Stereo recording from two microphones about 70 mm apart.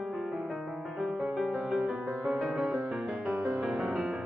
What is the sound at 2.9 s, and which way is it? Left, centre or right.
Music, centre.